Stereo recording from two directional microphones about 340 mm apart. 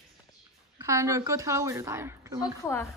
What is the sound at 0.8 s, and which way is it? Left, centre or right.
A woman's voice, centre.